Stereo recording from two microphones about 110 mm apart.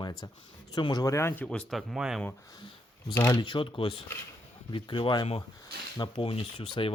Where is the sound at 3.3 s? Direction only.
45° left (ahead or behind).